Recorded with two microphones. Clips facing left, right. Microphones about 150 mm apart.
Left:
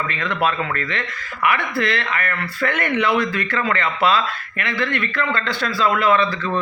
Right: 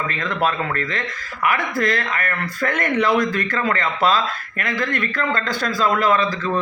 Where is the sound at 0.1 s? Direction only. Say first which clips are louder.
Even; 40° right (ahead or behind).